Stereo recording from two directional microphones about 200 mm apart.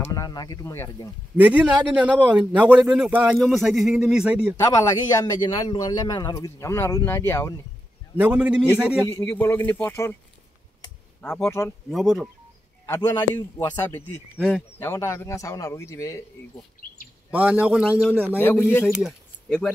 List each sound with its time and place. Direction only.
0.0 s a man's voice: 15° left (ahead or behind)
1.3 s speech: 5° right (ahead or behind)
4.6 s a man's voice: 15° left (ahead or behind)
8.2 s speech: 5° right (ahead or behind)
9.1 s a man's voice: 10° left (ahead or behind)
11.1 s speech: 5° left (ahead or behind)
12.8 s a man's voice: 15° left (ahead or behind)
13.9 s a man's voice: 5° left (ahead or behind)
17.3 s a man's voice: 10° right (ahead or behind)
18.4 s a man's voice: 10° left (ahead or behind)
18.9 s speech: centre (ahead or behind)